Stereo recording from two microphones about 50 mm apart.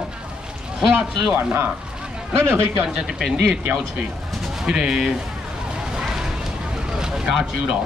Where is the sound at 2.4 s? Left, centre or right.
Right.